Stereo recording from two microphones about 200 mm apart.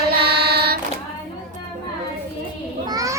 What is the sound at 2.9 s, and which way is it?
Children playing, 15° right (ahead or behind).